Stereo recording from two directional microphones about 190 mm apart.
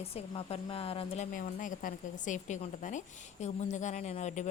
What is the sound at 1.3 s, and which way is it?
A woman's voice, 45° left (ahead or behind).